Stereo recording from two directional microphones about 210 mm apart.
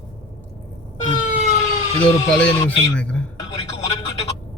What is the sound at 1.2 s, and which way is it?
Vehicle, 35° left (ahead or behind).